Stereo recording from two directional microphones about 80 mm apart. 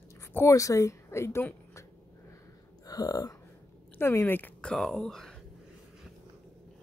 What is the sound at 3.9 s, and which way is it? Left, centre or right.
Speech, left.